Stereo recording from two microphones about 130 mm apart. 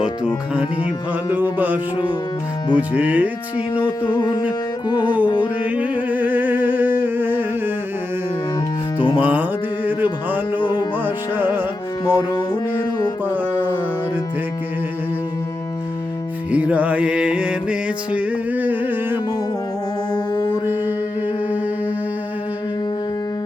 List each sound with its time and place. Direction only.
1.3 s music: 15° right (ahead or behind)
3.8 s music: 35° left (ahead or behind)
5.6 s a sound: 10° right (ahead or behind)
9.1 s music: 15° right (ahead or behind)
10.6 s music: 35° left (ahead or behind)
10.9 s music: 15° right (ahead or behind)
12.0 s music: 30° left (ahead or behind)
13.2 s music: 15° right (ahead or behind)
16.5 s music: 10° right (ahead or behind)
20.1 s music: 35° left (ahead or behind)